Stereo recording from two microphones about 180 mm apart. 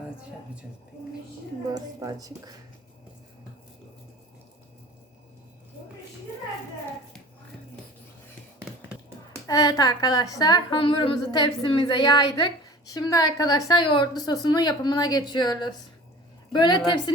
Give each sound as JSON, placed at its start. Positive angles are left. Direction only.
{"t": 1.7, "sound": "speech", "side_deg": -20}
{"t": 9.5, "sound": "a woman's voice", "side_deg": 20}